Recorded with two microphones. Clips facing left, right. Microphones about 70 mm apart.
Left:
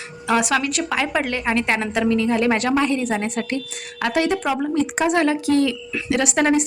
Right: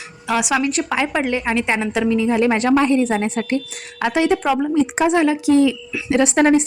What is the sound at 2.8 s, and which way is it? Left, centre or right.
A woman's voice, right.